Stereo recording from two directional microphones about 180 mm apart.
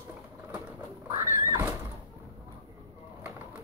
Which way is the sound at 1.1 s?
15° right (ahead or behind).